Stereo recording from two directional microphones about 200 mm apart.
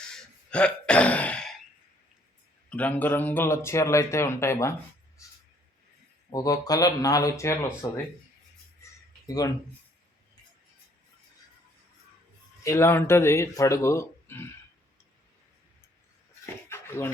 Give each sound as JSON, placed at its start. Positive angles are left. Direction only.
{"t": 0.1, "sound": "throat clearing", "side_deg": 5}
{"t": 2.6, "sound": "speech", "side_deg": 5}
{"t": 6.3, "sound": "speech", "side_deg": 20}
{"t": 8.8, "sound": "a sound", "side_deg": 15}
{"t": 12.6, "sound": "speech", "side_deg": 15}
{"t": 16.6, "sound": "bird", "side_deg": 10}